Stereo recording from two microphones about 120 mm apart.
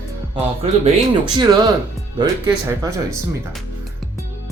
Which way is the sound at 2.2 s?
35° right (ahead or behind).